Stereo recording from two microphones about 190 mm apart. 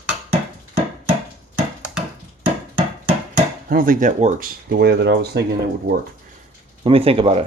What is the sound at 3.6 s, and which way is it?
Speech, 50° right (ahead or behind).